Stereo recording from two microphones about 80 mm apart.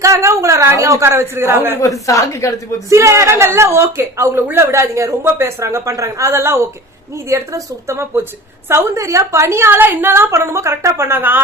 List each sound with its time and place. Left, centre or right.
0.0 s a woman's voice: right
1.8 s a woman's voice: left
2.9 s a woman's voice: right